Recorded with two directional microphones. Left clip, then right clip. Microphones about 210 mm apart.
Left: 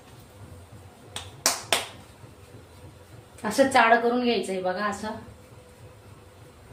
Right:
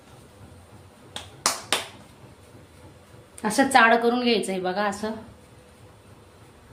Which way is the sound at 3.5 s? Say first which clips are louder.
Right 1 dB; 60° right (ahead or behind).